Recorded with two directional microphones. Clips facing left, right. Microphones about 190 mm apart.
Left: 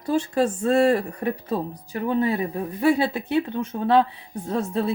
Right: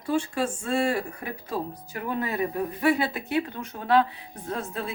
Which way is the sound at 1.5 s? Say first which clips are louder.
Left 4 dB; 30° left (ahead or behind).